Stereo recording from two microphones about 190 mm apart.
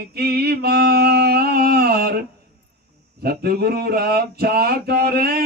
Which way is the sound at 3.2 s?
55° right (ahead or behind).